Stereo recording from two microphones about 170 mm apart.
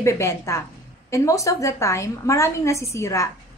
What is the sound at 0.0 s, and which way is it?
A woman's voice, 15° left (ahead or behind).